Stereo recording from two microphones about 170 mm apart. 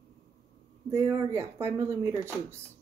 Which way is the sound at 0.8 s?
20° right (ahead or behind).